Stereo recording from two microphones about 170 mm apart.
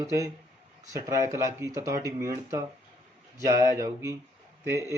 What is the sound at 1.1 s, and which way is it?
Speech, 15° right (ahead or behind).